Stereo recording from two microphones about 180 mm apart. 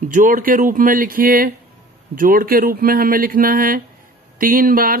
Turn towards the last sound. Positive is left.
turn(degrees=-50)  # may be behind; listen again after turning